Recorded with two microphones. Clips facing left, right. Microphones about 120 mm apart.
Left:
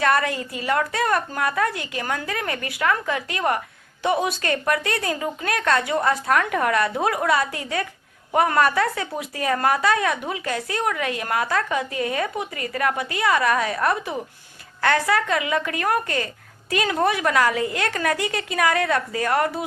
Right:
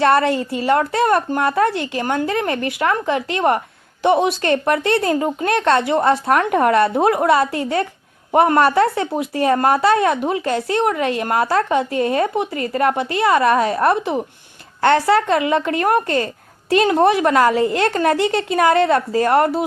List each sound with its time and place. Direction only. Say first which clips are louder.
0.0 s speech: right 6 dB; 30° right (ahead or behind)